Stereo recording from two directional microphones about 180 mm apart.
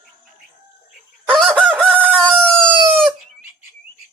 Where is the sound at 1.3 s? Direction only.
5° left (ahead or behind).